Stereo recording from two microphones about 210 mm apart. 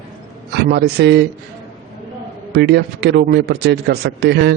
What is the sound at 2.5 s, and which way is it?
A man's voice, 50° right (ahead or behind).